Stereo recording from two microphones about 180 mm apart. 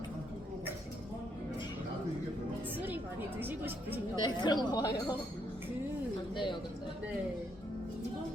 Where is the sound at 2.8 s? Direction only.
10° right (ahead or behind).